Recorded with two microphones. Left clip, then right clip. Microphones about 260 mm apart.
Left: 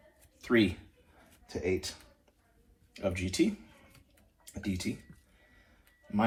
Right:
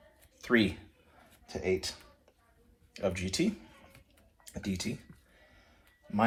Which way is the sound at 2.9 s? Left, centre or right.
Right.